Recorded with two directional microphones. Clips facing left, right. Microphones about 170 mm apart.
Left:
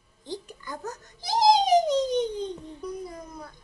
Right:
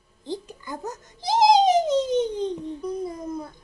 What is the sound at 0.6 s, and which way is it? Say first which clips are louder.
Babbling: right 3 dB; 20° right (ahead or behind).